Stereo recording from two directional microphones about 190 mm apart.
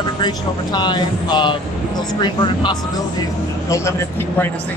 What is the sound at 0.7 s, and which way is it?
Speech, 25° left (ahead or behind).